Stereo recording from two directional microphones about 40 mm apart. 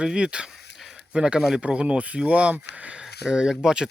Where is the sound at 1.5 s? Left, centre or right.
Right.